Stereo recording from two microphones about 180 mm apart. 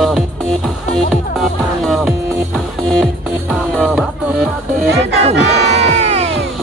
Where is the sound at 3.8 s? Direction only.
Centre (ahead or behind).